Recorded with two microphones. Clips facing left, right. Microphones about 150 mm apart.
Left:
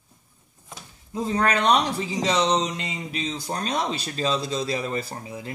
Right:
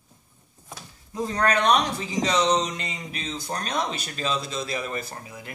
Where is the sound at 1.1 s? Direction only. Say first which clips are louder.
Left 1 dB; 25° left (ahead or behind).